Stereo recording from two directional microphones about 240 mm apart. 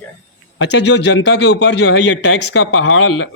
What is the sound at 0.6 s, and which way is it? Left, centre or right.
Speech, left.